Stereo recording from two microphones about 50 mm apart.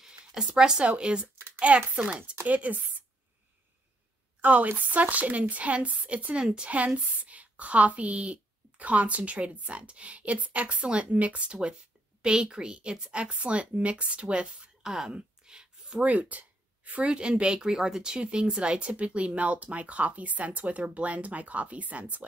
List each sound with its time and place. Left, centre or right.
0.2 s speech: centre
2.4 s speech: right
4.4 s a woman's voice: right; by 15.1 s centre
15.1 s a sound: centre
16.1 s speech: right
17.1 s a woman's voice: centre